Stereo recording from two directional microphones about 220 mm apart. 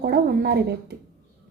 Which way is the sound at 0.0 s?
45° right (ahead or behind).